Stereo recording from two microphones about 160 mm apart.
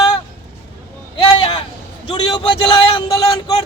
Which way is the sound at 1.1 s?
30° left (ahead or behind).